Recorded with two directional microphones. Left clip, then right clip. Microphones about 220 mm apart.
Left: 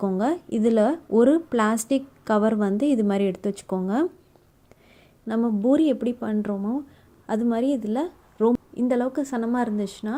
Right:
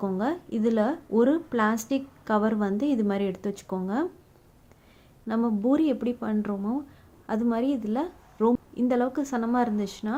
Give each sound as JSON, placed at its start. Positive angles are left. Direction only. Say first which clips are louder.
{"t": 0.0, "sound": "speech", "louder": "left 4 dB", "side_deg": 25}
{"t": 5.3, "sound": "a woman's voice", "louder": "left 3 dB", "side_deg": 15}